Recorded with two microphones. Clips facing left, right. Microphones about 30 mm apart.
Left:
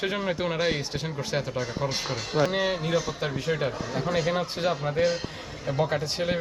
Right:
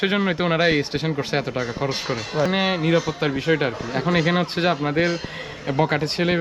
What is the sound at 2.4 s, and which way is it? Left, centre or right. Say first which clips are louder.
Speech: right 5 dB; right.